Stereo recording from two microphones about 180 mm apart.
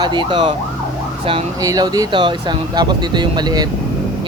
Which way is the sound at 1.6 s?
20° right (ahead or behind).